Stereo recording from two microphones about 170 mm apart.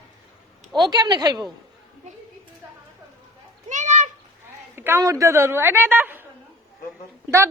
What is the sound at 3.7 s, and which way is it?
Children playing, 45° right (ahead or behind).